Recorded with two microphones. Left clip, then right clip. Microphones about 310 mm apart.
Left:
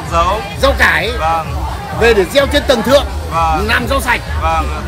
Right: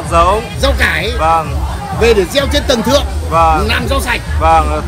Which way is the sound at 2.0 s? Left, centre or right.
Centre.